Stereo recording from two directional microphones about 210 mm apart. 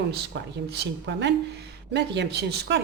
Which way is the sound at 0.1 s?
50° right (ahead or behind).